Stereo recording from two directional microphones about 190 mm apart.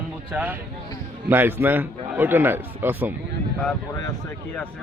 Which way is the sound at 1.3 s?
10° right (ahead or behind).